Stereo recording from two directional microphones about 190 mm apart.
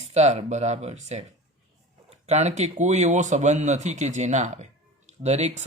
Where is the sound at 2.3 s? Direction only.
35° right (ahead or behind).